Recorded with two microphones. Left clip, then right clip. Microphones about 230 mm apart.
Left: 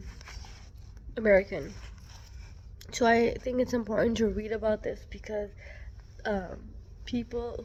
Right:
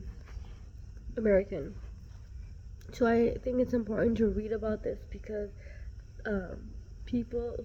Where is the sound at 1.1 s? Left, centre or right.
Centre.